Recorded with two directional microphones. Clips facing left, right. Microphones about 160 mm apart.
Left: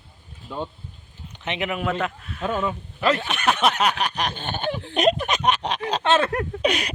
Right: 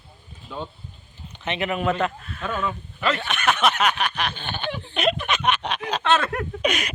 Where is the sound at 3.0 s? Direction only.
35° left (ahead or behind).